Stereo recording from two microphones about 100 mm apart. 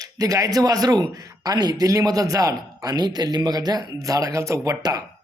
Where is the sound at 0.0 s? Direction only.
40° right (ahead or behind).